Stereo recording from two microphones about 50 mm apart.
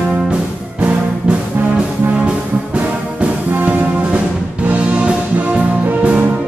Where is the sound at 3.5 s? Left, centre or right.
Right.